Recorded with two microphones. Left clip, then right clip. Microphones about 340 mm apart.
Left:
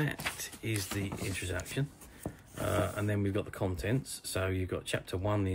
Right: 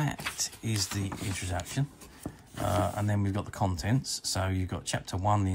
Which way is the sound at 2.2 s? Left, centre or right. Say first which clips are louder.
Even; right.